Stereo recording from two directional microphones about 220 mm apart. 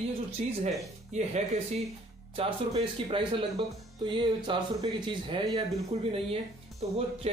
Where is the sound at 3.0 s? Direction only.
25° right (ahead or behind).